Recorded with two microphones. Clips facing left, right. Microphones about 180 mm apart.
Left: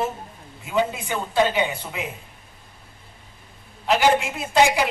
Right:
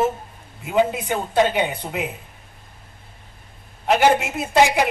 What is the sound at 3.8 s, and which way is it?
Speech, 50° right (ahead or behind).